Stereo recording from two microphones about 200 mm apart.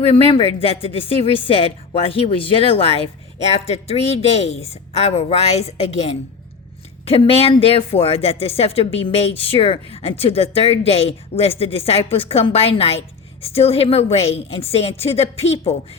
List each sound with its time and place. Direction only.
0.0 s speech: 30° left (ahead or behind)